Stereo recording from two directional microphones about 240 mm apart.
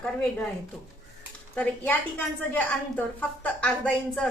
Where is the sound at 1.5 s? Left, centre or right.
Centre.